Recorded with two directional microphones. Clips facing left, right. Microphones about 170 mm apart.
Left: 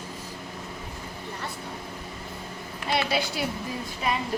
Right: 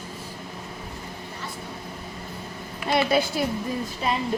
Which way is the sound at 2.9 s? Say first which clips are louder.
Right 5 dB; 50° right (ahead or behind).